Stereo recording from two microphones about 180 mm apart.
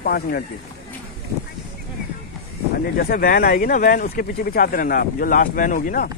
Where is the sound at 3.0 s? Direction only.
55° left (ahead or behind).